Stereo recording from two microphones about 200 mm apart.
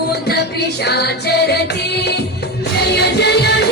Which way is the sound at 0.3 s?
55° left (ahead or behind).